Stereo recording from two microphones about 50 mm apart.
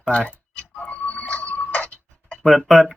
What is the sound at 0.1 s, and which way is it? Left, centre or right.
Speech, left.